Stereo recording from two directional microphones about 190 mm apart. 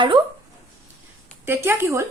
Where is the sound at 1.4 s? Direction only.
10° right (ahead or behind).